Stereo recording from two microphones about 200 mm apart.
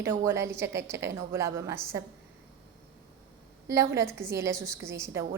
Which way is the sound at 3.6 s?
15° right (ahead or behind).